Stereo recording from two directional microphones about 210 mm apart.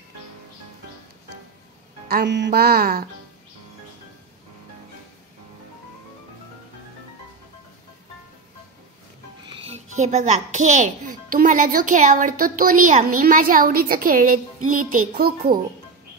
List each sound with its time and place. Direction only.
2.0 s music: 50° right (ahead or behind)
9.7 s a child's voice: 35° right (ahead or behind)